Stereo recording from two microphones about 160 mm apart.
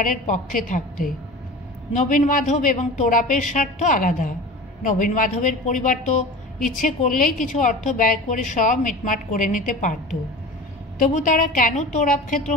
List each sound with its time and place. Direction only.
0.0 s a woman's voice: 55° left (ahead or behind)
11.1 s a woman's voice: 55° left (ahead or behind)